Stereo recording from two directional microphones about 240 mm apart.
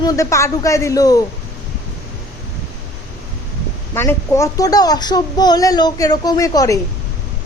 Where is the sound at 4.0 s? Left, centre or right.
Centre.